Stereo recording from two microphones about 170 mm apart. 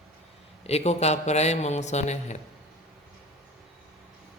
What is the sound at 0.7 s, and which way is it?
Mantra, 40° left (ahead or behind).